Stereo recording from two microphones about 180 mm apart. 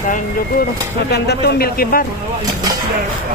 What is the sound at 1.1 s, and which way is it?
Speech, 65° left (ahead or behind).